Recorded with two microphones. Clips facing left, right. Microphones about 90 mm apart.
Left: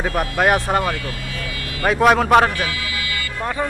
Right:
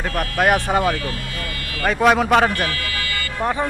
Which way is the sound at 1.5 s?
5° left (ahead or behind).